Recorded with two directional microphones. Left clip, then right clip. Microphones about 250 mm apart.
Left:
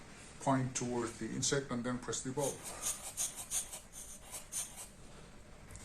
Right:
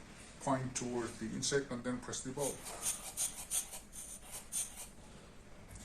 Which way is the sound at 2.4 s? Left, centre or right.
Centre.